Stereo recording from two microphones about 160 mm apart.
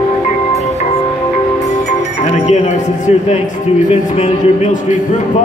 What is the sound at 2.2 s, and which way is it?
Music, 45° left (ahead or behind).